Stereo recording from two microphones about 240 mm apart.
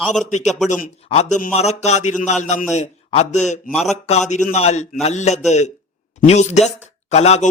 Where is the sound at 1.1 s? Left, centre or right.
Left.